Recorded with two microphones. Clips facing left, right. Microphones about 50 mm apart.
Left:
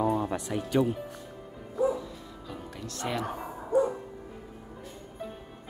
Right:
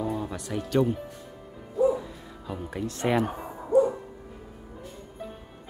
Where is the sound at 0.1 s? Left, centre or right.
Left.